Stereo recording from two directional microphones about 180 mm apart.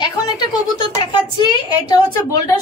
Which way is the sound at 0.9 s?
25° left (ahead or behind).